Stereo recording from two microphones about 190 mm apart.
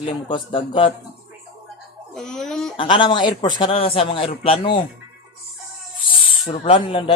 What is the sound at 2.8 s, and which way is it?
A man's voice, 25° left (ahead or behind).